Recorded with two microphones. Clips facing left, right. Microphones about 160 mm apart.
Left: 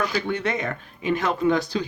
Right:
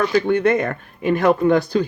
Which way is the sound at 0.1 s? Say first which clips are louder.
Right 9 dB; 55° right (ahead or behind).